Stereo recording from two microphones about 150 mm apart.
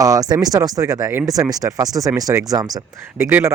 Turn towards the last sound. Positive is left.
turn(degrees=-15)  # may be behind; listen again after turning